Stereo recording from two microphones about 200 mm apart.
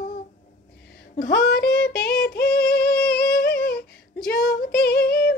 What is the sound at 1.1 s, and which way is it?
Female singing, 55° left (ahead or behind).